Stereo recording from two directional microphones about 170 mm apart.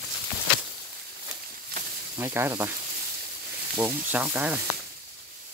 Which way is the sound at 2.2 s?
15° right (ahead or behind).